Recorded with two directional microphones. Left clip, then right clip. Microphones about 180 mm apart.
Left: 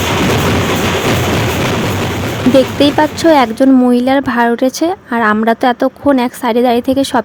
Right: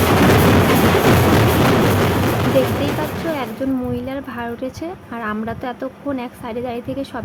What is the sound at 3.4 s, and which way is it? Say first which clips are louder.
Speech: left 14 dB; 50° left (ahead or behind).